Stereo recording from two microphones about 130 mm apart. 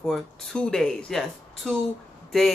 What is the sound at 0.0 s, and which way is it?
Speech, 5° left (ahead or behind).